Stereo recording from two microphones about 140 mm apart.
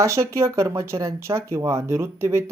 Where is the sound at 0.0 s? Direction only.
20° right (ahead or behind).